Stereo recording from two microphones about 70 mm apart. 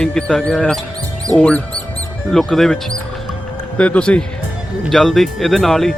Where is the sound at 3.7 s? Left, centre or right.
Centre.